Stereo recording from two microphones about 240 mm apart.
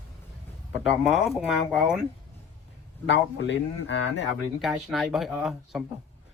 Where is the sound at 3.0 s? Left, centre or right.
Left.